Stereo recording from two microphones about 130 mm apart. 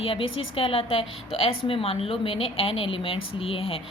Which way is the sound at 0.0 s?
45° left (ahead or behind).